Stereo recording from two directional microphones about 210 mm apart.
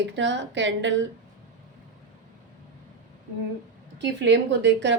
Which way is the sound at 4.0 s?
60° right (ahead or behind).